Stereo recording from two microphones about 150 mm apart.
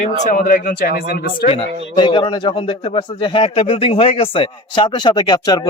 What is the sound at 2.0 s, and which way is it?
A man's voice, 35° left (ahead or behind).